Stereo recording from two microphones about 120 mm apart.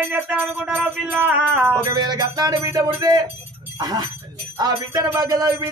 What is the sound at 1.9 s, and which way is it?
Jingle bell, 35° right (ahead or behind).